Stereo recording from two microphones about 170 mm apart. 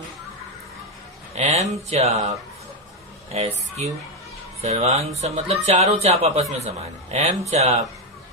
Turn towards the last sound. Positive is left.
turn(degrees=-40)  # may be behind; listen again after turning